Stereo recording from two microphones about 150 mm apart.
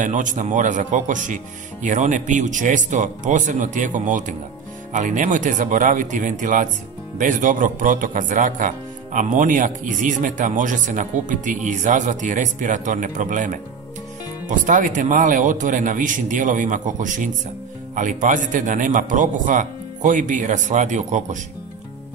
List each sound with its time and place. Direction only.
0.0 s speech: 55° right (ahead or behind)